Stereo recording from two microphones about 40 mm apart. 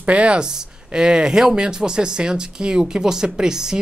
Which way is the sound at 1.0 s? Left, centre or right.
Centre.